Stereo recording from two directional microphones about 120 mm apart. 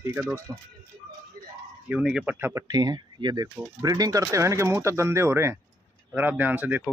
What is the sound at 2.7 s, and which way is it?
Speech, 35° right (ahead or behind).